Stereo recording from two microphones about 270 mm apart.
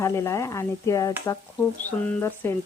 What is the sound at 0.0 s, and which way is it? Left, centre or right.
Stir, centre.